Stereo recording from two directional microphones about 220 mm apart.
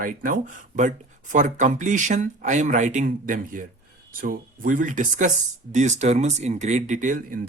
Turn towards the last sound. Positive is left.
turn(degrees=-35)  # may be behind; listen again after turning